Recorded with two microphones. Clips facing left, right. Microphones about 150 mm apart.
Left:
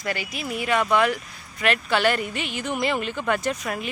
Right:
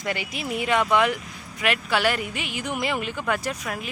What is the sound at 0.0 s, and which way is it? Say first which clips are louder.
Speech: even; 20° right (ahead or behind).